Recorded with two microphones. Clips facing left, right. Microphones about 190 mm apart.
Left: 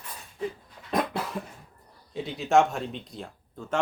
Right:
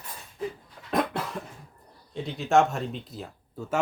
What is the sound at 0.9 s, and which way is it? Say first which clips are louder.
Cough: right 1 dB; centre (ahead or behind).